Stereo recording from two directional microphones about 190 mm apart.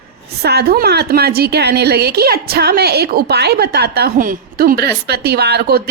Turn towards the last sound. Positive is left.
turn(degrees=-55)  # may be behind; listen again after turning